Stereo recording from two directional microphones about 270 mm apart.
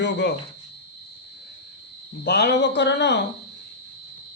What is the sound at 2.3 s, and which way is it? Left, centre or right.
Speech, left.